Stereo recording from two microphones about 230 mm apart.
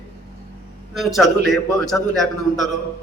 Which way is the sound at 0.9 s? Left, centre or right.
Centre.